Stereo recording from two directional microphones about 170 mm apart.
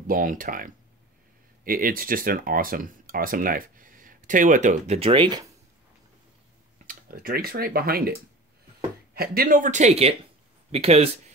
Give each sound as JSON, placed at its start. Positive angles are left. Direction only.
{"t": 0.0, "sound": "speech", "side_deg": -55}
{"t": 6.9, "sound": "speech", "side_deg": -55}